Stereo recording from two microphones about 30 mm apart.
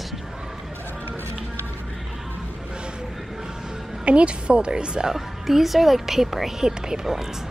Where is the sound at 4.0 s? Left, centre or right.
Right.